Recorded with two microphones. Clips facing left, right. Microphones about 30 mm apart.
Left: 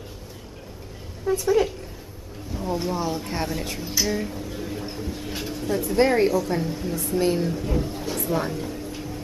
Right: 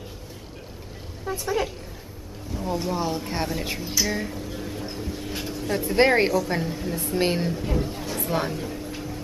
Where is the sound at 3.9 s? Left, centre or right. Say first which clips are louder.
Left 2 dB; centre.